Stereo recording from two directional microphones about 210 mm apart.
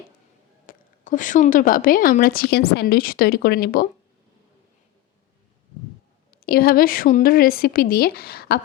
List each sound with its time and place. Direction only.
0.7 s a woman's voice: 40° left (ahead or behind)
6.3 s a woman's voice: 45° left (ahead or behind)